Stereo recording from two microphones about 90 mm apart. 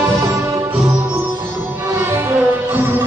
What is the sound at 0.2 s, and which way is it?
Music, 30° right (ahead or behind).